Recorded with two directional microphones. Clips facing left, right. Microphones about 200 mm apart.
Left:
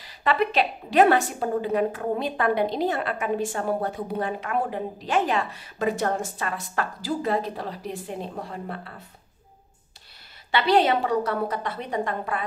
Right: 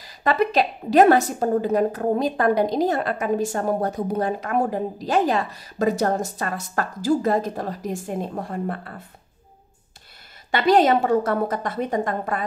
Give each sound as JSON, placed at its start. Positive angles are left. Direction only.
{"t": 0.0, "sound": "a woman's voice", "side_deg": -40}
{"t": 10.5, "sound": "a woman's voice", "side_deg": -45}